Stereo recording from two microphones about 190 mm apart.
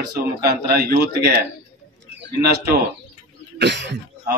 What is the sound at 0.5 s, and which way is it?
Speech, 55° right (ahead or behind).